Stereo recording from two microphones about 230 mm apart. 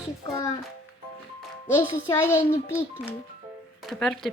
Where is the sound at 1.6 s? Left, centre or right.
Centre.